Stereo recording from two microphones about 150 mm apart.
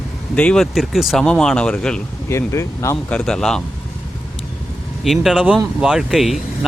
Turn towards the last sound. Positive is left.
turn(degrees=0)  # may be behind; listen again after turning